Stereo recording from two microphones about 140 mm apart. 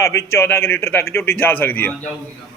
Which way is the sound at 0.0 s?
20° left (ahead or behind).